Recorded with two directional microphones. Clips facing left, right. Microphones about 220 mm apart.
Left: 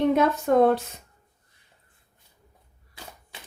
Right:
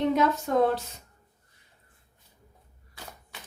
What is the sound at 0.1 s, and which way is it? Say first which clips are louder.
Speech: left 3 dB; 55° left (ahead or behind).